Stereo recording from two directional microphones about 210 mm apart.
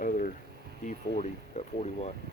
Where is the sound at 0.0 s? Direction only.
40° left (ahead or behind).